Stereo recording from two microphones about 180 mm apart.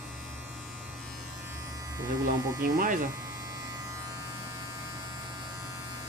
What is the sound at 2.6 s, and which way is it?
Speech, 50° right (ahead or behind).